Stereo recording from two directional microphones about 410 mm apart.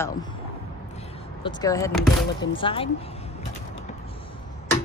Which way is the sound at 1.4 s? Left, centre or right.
Centre.